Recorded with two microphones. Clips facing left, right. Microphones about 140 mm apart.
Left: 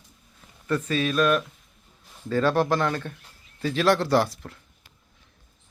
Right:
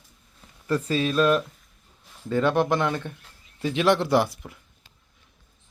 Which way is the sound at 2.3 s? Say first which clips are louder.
Even; 20° right (ahead or behind).